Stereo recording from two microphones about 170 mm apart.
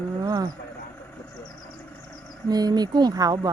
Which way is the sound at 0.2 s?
20° right (ahead or behind).